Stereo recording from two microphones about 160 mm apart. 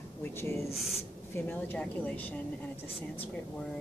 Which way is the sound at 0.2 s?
15° left (ahead or behind).